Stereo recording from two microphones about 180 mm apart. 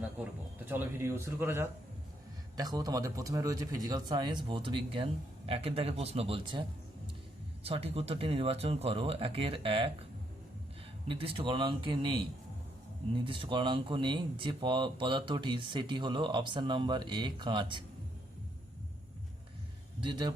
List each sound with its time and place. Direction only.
0.2 s speech: 5° right (ahead or behind); by 9.9 s 30° right (ahead or behind)
11.1 s speech: 30° right (ahead or behind)
13.1 s speech: 30° right (ahead or behind)
20.0 s speech: 25° right (ahead or behind)